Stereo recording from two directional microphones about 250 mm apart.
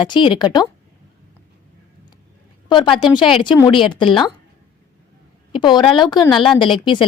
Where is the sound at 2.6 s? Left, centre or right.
Centre.